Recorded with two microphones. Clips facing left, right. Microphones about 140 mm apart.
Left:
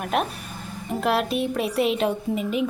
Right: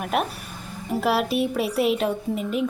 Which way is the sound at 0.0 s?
5° right (ahead or behind).